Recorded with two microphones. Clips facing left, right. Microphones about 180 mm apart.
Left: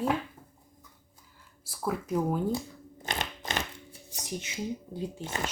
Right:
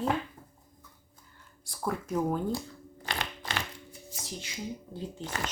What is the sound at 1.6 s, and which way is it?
Speech, 5° left (ahead or behind).